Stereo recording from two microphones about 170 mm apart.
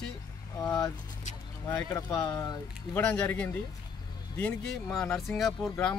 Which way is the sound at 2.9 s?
10° left (ahead or behind).